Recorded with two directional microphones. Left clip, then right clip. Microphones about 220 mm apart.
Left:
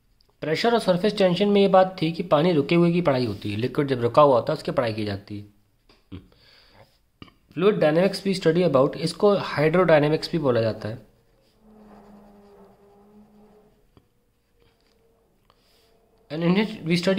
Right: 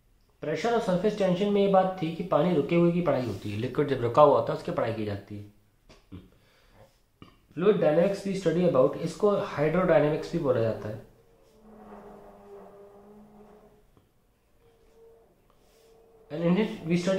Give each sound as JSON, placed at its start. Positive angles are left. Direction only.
{"t": 0.4, "sound": "speech", "side_deg": 50}
{"t": 7.2, "sound": "speech", "side_deg": 55}
{"t": 16.3, "sound": "a man's voice", "side_deg": 55}